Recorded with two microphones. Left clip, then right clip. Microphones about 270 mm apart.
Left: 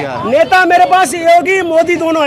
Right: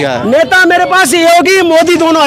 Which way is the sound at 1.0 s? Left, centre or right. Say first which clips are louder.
Right 3 dB; right.